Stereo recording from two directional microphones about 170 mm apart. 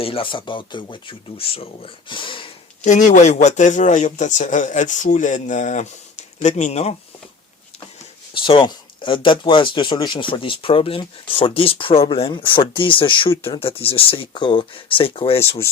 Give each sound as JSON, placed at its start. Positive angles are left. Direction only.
{"t": 0.0, "sound": "speech", "side_deg": 30}
{"t": 2.8, "sound": "speech", "side_deg": 45}
{"t": 8.3, "sound": "speech", "side_deg": 30}